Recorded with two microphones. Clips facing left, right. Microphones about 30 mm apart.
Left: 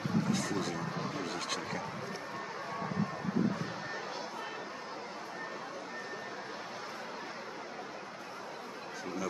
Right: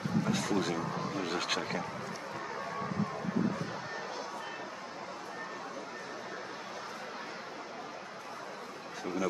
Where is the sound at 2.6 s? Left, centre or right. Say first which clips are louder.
Right 1 dB; centre.